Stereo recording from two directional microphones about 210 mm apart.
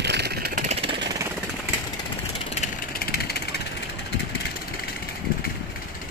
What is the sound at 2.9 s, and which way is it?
Vehicle, 45° left (ahead or behind).